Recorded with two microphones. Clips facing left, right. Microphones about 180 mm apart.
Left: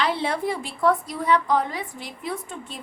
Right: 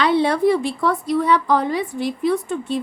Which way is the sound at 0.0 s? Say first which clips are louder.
Right 8 dB; 70° right (ahead or behind).